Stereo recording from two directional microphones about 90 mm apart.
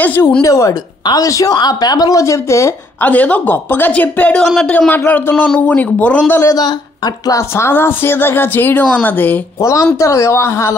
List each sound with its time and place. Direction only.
0.0 s a woman's voice: 20° left (ahead or behind)
3.0 s a man's voice: 15° left (ahead or behind)
7.2 s speech: 30° left (ahead or behind)
9.6 s speech: 35° left (ahead or behind)